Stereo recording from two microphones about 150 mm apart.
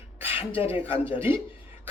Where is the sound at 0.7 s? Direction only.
15° right (ahead or behind).